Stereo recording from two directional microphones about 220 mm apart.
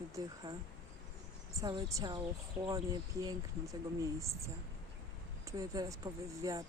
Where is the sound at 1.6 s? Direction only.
20° right (ahead or behind).